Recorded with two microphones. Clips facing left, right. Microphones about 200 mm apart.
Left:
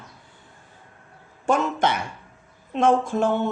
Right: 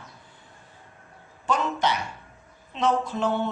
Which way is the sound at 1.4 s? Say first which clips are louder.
Left 4 dB; 50° left (ahead or behind).